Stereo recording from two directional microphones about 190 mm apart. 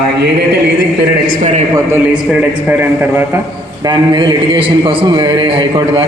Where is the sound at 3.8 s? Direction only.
25° right (ahead or behind).